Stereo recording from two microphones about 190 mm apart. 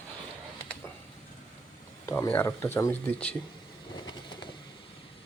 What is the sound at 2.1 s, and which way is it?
Speech, 15° left (ahead or behind).